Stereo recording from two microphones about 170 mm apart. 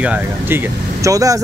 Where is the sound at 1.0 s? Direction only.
20° right (ahead or behind).